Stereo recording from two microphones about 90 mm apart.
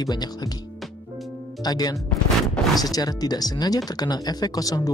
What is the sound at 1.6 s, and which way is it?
Speech, 45° left (ahead or behind).